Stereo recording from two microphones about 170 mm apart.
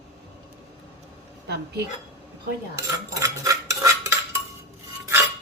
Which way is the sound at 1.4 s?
70° right (ahead or behind).